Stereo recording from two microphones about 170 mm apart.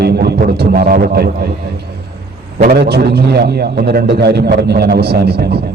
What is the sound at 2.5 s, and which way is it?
A man's voice, 65° right (ahead or behind).